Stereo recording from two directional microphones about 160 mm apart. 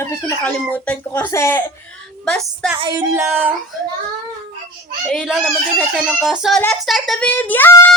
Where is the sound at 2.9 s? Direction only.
15° right (ahead or behind).